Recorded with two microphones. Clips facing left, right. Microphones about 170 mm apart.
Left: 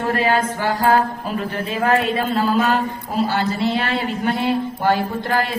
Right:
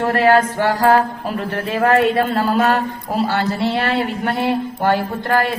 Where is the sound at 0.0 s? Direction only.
65° right (ahead or behind).